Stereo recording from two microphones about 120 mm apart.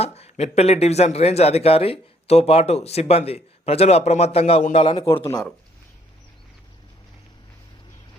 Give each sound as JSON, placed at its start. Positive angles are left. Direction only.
{"t": 0.0, "sound": "a man's voice", "side_deg": 60}
{"t": 5.2, "sound": "speech", "side_deg": 35}